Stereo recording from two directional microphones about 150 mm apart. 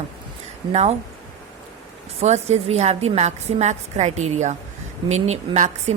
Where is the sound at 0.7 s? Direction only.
50° right (ahead or behind).